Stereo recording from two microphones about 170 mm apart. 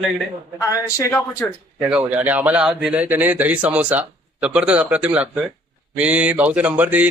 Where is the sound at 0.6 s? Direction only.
20° left (ahead or behind).